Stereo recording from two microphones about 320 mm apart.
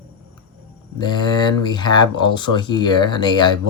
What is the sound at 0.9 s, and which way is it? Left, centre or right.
Speech, centre.